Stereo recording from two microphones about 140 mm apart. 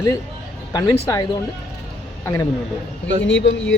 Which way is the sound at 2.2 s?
25° left (ahead or behind).